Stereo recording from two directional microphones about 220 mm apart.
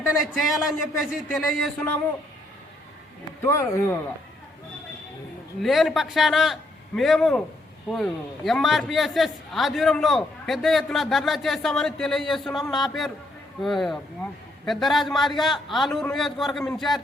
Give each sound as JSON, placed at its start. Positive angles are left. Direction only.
{"t": 0.0, "sound": "a man's voice", "side_deg": 0}
{"t": 3.4, "sound": "speech", "side_deg": 10}
{"t": 5.6, "sound": "a man's voice", "side_deg": 0}